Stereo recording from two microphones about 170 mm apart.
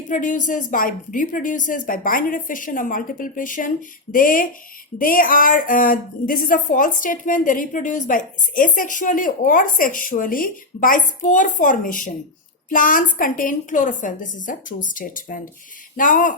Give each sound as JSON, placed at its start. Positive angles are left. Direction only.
{"t": 0.1, "sound": "speech", "side_deg": 50}